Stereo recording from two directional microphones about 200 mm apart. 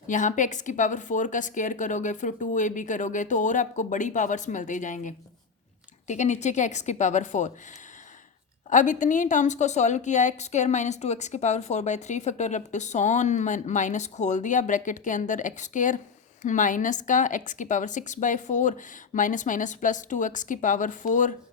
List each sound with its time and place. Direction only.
0.1 s a woman's voice: 40° left (ahead or behind)
8.7 s a woman's voice: 40° left (ahead or behind)